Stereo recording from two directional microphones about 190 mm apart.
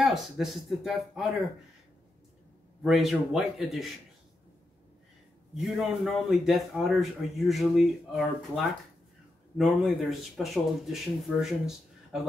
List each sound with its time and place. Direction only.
0.0 s a man's voice: centre (ahead or behind)
2.8 s a man's voice: centre (ahead or behind)
5.6 s a man's voice: centre (ahead or behind)